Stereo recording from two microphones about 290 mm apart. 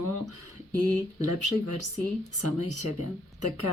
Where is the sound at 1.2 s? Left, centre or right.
Right.